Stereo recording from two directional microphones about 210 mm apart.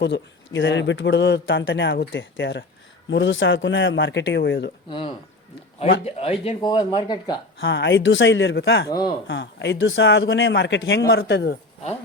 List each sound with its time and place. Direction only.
0.0 s speech: 60° left (ahead or behind)
4.9 s speech: 25° left (ahead or behind)
7.6 s speech: 55° left (ahead or behind)
8.9 s speech: 20° left (ahead or behind)
9.2 s speech: 55° left (ahead or behind)